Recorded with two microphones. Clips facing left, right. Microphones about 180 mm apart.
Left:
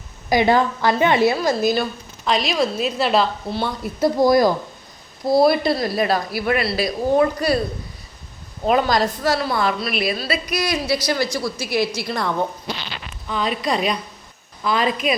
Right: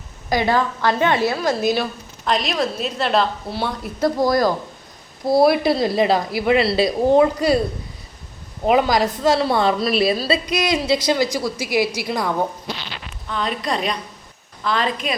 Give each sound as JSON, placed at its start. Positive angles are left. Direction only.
{"t": 0.3, "sound": "a woman's voice", "side_deg": 15}
{"t": 4.0, "sound": "a woman's voice", "side_deg": 10}
{"t": 5.2, "sound": "a woman's voice", "side_deg": -5}
{"t": 5.7, "sound": "a woman's voice", "side_deg": -20}
{"t": 8.6, "sound": "a woman's voice", "side_deg": -15}
{"t": 13.2, "sound": "a woman's voice", "side_deg": 5}